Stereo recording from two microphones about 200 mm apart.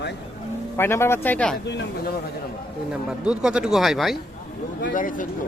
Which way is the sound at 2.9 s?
5° right (ahead or behind).